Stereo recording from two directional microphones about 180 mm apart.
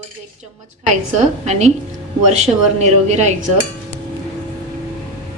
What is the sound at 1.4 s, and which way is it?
A woman's voice, 40° right (ahead or behind).